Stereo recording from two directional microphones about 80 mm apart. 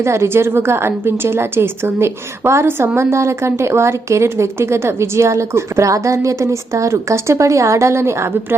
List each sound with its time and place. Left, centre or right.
0.0 s a woman's voice: right